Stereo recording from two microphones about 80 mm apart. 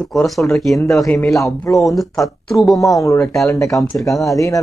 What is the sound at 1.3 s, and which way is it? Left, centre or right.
Speech, left.